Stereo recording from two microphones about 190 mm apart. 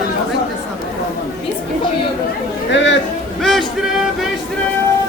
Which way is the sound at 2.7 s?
70° left (ahead or behind).